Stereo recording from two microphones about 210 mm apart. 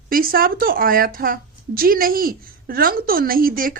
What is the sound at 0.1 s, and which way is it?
A woman's voice, 45° right (ahead or behind).